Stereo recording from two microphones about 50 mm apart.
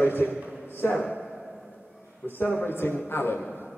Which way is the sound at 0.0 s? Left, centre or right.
Left.